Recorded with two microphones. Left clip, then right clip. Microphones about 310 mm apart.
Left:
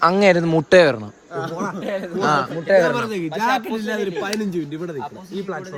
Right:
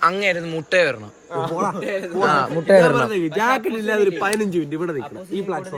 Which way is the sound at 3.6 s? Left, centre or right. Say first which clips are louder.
Right 2 dB; centre.